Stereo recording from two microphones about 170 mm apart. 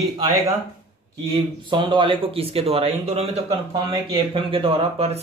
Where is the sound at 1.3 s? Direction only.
30° right (ahead or behind).